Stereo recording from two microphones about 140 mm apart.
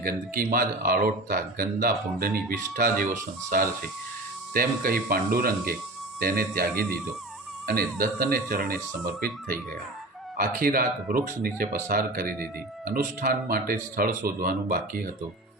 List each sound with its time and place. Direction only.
0.0 s speech: 90° right
4.5 s speech: 90° right
10.3 s speech: 90° right